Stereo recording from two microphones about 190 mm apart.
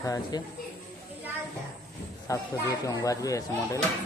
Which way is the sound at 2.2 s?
15° left (ahead or behind).